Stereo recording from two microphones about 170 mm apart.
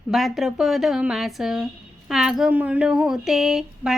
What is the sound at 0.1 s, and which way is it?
Speech, centre (ahead or behind).